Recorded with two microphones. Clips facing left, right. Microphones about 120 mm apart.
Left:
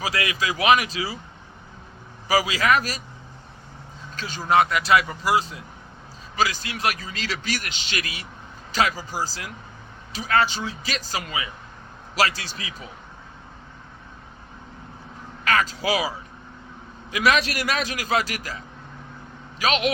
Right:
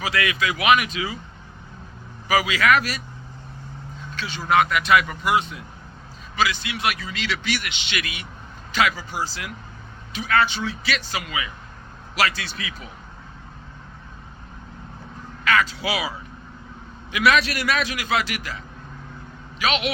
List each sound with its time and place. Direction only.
0.0 s a man's voice: 35° left (ahead or behind)
2.2 s a man's voice: 35° left (ahead or behind)
4.1 s a man's voice: 40° left (ahead or behind)
15.4 s a man's voice: 40° left (ahead or behind)